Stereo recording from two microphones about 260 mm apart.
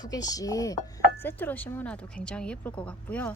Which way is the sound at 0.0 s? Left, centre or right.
Centre.